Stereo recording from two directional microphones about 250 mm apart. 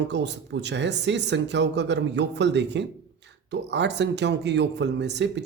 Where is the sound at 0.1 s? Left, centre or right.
Right.